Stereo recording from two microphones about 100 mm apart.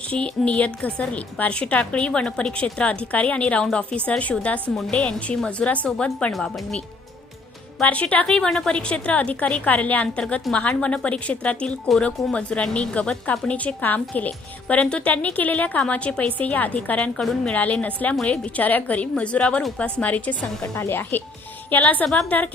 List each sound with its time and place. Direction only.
0.1 s a woman's voice: 10° left (ahead or behind)